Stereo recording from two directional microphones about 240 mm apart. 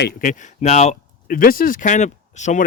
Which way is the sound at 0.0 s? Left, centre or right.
Left.